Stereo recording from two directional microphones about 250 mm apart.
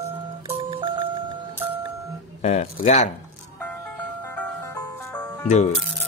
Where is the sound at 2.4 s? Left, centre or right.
Left.